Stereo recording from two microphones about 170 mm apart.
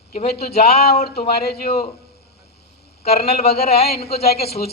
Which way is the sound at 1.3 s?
65° left (ahead or behind).